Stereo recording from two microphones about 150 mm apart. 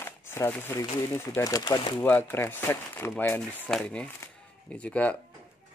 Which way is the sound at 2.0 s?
15° left (ahead or behind).